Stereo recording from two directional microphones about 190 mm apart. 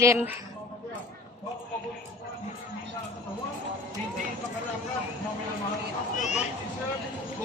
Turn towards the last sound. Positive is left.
turn(degrees=35)  # may be behind; listen again after turning